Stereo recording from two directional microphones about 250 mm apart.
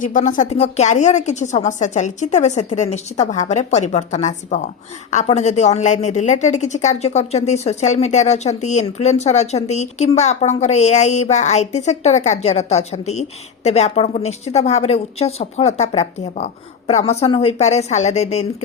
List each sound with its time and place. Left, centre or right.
0.0 s a woman's voice: left